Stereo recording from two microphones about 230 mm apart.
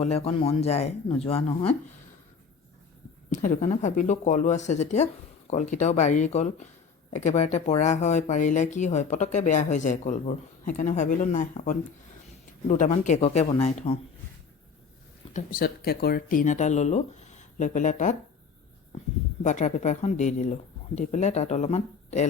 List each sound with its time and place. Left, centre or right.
0.0 s speech: left
3.2 s speech: left
15.3 s speech: left
19.4 s speech: left